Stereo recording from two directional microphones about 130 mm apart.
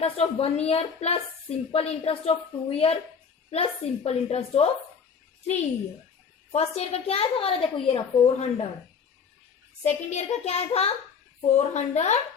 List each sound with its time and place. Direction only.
0.0 s a woman's voice: 50° left (ahead or behind)
6.5 s a woman's voice: 55° left (ahead or behind)
9.8 s a woman's voice: 60° left (ahead or behind)